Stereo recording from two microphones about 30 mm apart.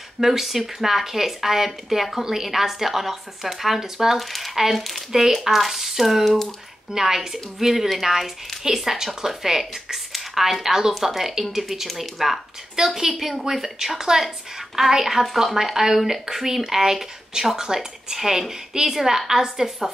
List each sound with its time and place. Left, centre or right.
0.2 s speech: centre
4.2 s speech: centre
6.9 s speech: centre
12.7 s speech: centre
17.7 s speech: centre